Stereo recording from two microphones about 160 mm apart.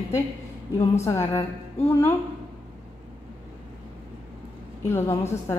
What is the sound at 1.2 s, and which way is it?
Speech, 40° left (ahead or behind).